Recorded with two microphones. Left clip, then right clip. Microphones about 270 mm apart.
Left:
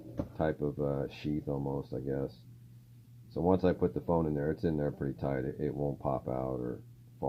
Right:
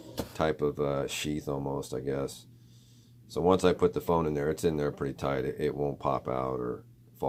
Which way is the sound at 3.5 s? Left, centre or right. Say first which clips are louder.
Right 5 dB; centre.